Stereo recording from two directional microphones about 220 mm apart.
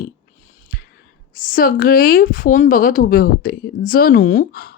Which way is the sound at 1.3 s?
40° left (ahead or behind).